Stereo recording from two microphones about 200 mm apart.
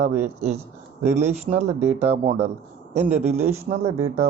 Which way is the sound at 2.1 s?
35° right (ahead or behind).